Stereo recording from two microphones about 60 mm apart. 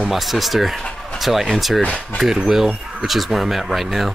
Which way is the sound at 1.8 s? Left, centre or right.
Left.